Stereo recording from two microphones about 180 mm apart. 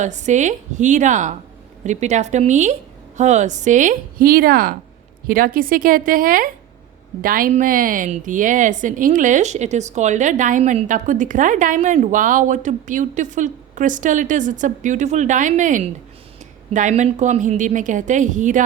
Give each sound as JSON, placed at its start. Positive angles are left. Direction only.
{"t": 0.0, "sound": "a woman's voice", "side_deg": -40}